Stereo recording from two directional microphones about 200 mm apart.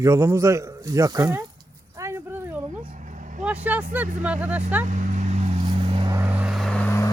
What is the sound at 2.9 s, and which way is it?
Vehicle, 40° right (ahead or behind).